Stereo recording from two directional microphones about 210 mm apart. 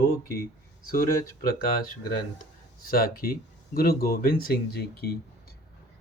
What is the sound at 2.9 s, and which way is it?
Speech, 45° left (ahead or behind).